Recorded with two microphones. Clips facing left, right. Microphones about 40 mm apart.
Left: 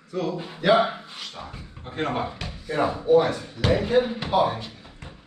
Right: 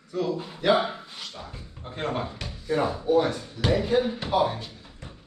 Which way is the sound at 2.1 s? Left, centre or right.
Centre.